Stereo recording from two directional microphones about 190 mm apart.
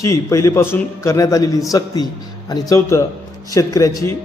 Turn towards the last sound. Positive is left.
turn(degrees=15)  # may be behind; listen again after turning